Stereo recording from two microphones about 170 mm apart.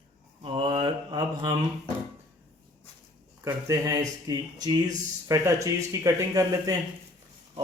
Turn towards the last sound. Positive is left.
turn(degrees=-20)  # may be behind; listen again after turning